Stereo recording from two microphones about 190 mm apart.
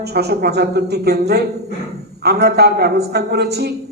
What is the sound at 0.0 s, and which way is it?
A man's voice, 60° right (ahead or behind).